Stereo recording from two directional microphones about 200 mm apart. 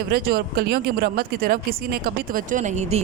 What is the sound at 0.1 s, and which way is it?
A woman's voice, 50° right (ahead or behind).